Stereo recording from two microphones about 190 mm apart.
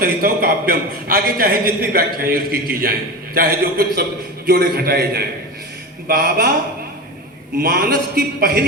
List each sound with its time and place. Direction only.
0.0 s a man's voice: 50° right (ahead or behind)
7.6 s a man's voice: 50° right (ahead or behind)